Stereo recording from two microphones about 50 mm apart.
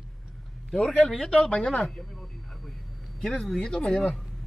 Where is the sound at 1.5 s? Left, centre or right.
Centre.